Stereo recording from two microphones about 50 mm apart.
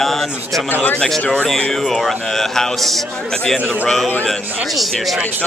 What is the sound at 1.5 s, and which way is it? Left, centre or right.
Speech, centre.